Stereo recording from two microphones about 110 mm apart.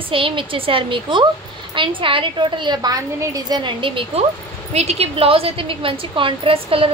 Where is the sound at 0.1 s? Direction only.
50° right (ahead or behind).